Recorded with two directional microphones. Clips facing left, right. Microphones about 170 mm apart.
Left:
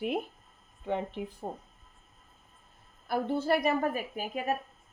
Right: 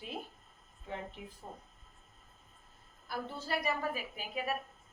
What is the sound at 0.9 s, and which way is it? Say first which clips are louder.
Speech: left 10 dB; 65° left (ahead or behind).